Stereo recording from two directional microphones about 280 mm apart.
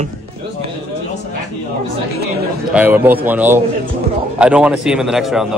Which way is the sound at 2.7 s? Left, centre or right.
Centre.